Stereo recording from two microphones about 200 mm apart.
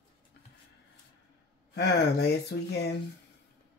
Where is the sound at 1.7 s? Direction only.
55° left (ahead or behind).